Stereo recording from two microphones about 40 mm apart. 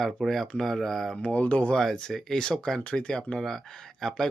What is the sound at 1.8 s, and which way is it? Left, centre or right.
Speech, centre.